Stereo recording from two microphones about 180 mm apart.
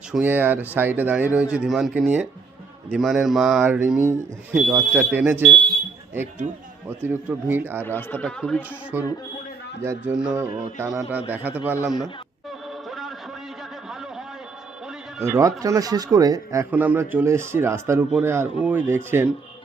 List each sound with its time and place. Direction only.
0.1 s speech: 10° right (ahead or behind)
6.8 s speech: 10° right (ahead or behind)
7.9 s speech: 10° left (ahead or behind)
8.9 s speech: 10° right (ahead or behind)
12.5 s music: centre (ahead or behind)
15.2 s speech: 15° right (ahead or behind)